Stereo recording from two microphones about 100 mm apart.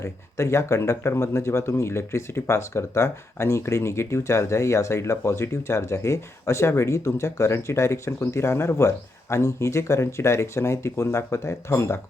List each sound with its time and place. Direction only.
0.0 s speech: 30° left (ahead or behind)